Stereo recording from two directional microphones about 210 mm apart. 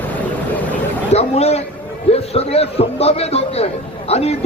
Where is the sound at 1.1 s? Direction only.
30° left (ahead or behind).